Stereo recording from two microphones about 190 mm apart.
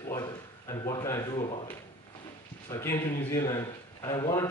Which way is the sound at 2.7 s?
15° left (ahead or behind).